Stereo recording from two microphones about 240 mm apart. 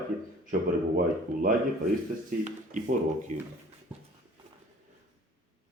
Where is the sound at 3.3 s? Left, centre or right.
Right.